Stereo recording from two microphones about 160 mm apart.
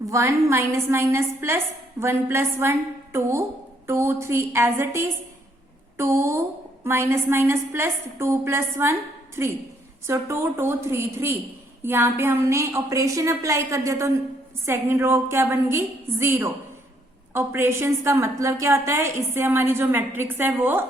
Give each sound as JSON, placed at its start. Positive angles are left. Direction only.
{"t": 0.0, "sound": "a woman's voice", "side_deg": -20}